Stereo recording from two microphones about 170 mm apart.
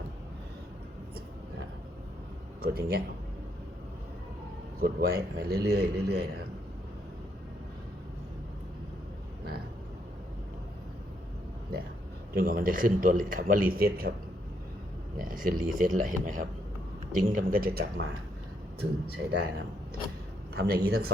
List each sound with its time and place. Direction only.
2.6 s speech: 65° right (ahead or behind)
4.8 s a man's voice: 60° right (ahead or behind)
12.3 s speech: 65° right (ahead or behind)
15.2 s a man's voice: 55° right (ahead or behind)